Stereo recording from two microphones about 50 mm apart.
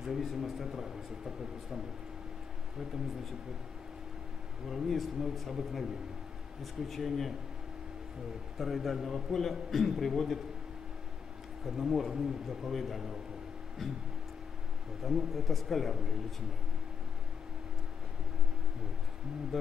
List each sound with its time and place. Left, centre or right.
0.0 s a man's voice: centre
4.6 s a man's voice: centre
8.5 s a man's voice: centre
11.6 s a man's voice: centre
15.0 s a man's voice: centre
19.5 s a man's voice: centre